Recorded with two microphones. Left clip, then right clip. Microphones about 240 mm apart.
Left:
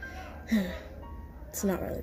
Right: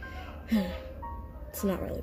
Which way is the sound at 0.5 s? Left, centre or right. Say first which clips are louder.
Even; centre.